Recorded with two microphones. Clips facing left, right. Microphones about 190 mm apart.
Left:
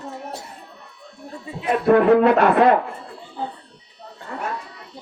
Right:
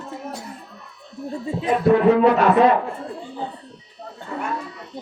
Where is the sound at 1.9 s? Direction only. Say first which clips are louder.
Left 1 dB; 55° left (ahead or behind).